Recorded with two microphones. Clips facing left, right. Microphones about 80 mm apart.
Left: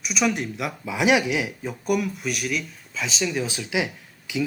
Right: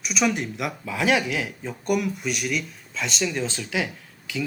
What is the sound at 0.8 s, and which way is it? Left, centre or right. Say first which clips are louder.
Speech: left 3 dB; centre.